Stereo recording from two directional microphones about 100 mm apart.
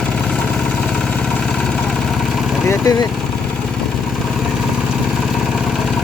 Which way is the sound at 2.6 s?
35° left (ahead or behind).